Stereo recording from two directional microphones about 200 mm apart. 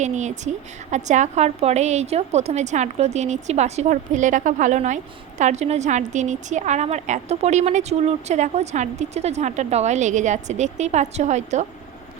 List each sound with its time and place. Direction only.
0.0 s a woman's voice: 35° right (ahead or behind)